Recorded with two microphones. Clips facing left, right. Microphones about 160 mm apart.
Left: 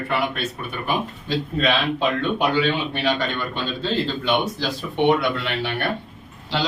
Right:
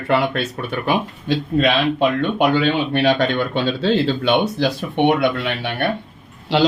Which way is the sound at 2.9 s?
70° right (ahead or behind).